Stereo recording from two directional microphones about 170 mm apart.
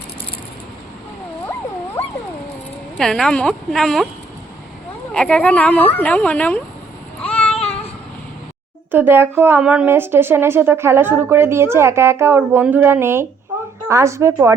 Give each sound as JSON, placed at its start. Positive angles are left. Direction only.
{"t": 3.0, "sound": "a woman's voice", "side_deg": 5}
{"t": 5.1, "sound": "speech", "side_deg": 5}
{"t": 7.2, "sound": "a sound", "side_deg": 10}
{"t": 8.9, "sound": "speech", "side_deg": -10}